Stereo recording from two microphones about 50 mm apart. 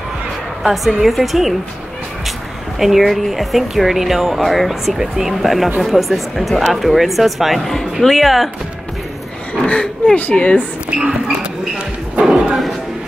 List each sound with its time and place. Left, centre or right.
0.7 s speech: centre
2.8 s speech: centre
9.6 s speech: centre
12.2 s a sound: centre